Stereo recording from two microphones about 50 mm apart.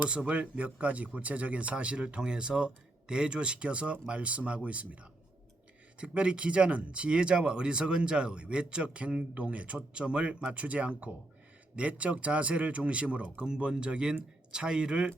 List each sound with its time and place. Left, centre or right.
0.0 s speech: right
6.0 s speech: right